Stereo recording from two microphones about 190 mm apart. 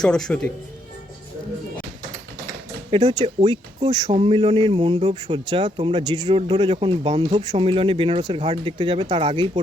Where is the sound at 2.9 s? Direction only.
25° right (ahead or behind).